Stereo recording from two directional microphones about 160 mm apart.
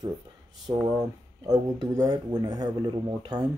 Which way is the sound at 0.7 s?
15° right (ahead or behind).